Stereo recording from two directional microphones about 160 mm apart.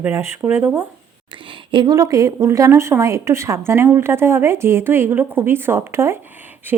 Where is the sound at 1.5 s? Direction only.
30° right (ahead or behind).